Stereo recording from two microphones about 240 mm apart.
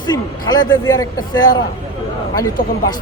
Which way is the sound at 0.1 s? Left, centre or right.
Centre.